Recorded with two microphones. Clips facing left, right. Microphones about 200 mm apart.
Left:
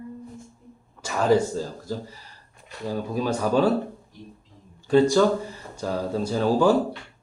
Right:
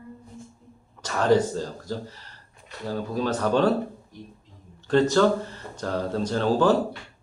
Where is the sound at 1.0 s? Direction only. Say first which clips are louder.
Even; 10° left (ahead or behind).